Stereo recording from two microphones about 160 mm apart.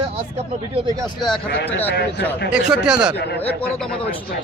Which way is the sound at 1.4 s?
90° left.